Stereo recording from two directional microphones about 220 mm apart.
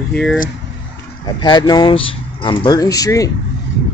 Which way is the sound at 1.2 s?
20° left (ahead or behind).